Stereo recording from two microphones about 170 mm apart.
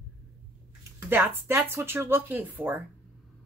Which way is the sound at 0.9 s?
15° right (ahead or behind).